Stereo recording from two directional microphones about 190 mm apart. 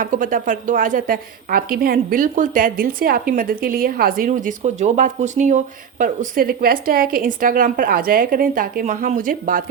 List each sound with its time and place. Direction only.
0.0 s a woman's voice: 45° right (ahead or behind)